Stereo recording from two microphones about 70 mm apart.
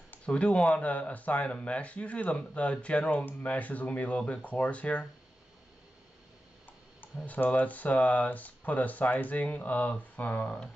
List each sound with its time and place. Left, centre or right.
0.1 s speech: centre
7.2 s speech: left